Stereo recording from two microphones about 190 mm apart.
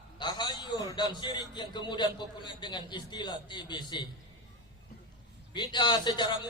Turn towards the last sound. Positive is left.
turn(degrees=25)  # may be behind; listen again after turning